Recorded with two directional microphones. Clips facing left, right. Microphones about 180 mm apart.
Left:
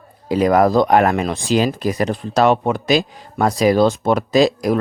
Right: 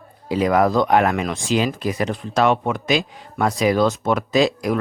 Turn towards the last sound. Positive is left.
turn(degrees=35)  # may be behind; listen again after turning